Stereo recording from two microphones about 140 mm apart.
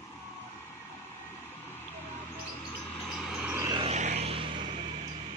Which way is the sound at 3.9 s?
55° right (ahead or behind).